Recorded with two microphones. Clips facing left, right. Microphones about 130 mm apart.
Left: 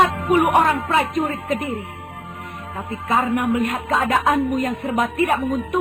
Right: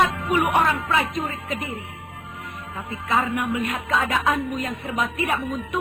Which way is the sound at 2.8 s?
40° left (ahead or behind).